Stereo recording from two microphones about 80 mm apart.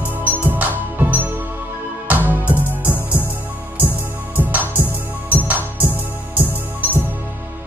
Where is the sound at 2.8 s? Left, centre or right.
Left.